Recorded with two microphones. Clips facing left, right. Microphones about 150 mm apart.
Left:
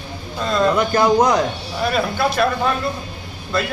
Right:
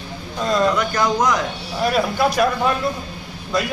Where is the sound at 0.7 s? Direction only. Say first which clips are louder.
Left 4 dB; 25° left (ahead or behind).